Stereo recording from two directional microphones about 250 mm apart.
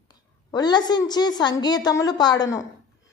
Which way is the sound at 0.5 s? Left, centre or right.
Centre.